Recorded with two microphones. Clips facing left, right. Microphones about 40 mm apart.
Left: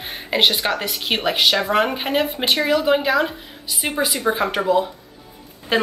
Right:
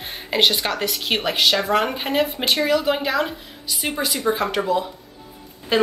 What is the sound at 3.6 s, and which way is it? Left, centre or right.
A woman's voice, centre.